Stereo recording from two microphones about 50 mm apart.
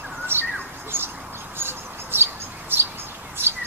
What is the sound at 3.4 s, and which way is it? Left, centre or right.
Bird, right.